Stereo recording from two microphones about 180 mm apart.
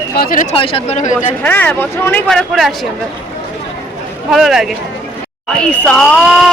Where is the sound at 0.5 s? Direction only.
30° left (ahead or behind).